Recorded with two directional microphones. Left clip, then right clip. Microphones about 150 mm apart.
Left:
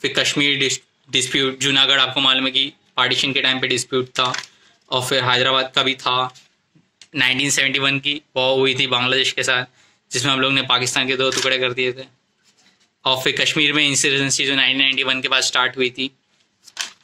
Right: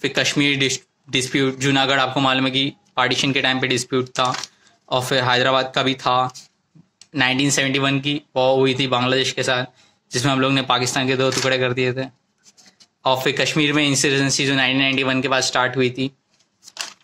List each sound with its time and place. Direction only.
0.0 s speech: 55° right (ahead or behind)